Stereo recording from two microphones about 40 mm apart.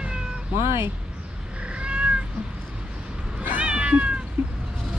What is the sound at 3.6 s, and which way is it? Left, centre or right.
Cat, right.